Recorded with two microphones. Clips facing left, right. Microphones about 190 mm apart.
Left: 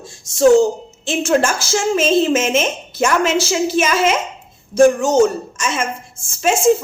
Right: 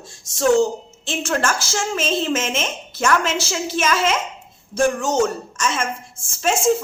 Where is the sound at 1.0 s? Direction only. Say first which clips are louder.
Left 6 dB; 15° left (ahead or behind).